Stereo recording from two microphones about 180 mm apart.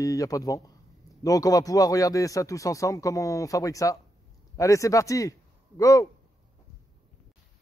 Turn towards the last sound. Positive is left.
turn(degrees=20)  # may be behind; listen again after turning